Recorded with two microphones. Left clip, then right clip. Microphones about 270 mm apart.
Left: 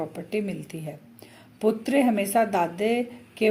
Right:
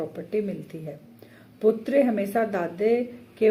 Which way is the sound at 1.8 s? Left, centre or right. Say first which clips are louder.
Right 1 dB; left.